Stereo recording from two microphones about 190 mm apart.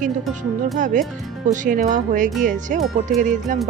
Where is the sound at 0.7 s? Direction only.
40° right (ahead or behind).